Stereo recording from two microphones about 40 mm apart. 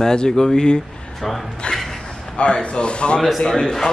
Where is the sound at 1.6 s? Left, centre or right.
Left.